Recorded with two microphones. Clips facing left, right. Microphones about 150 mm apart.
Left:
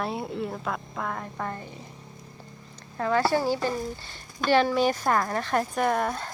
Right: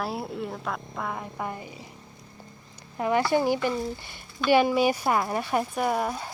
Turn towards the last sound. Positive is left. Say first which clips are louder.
# left 1 dB
turn(degrees=-5)  # may be behind; listen again after turning